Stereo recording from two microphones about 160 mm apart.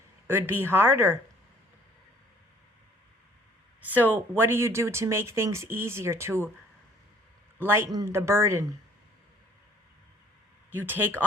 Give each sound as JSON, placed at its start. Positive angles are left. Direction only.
{"t": 0.3, "sound": "speech", "side_deg": -15}
{"t": 3.8, "sound": "speech", "side_deg": -10}
{"t": 7.6, "sound": "speech", "side_deg": -15}
{"t": 10.7, "sound": "speech", "side_deg": -10}